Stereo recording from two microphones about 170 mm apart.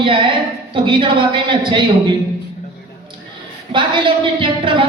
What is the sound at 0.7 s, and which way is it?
A woman's voice, 30° right (ahead or behind).